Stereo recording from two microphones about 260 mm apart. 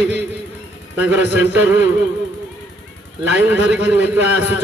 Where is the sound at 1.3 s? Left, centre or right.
Centre.